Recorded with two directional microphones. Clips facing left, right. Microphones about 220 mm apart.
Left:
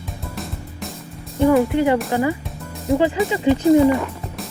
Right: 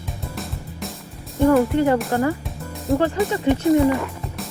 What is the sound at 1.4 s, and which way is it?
Speech, centre (ahead or behind).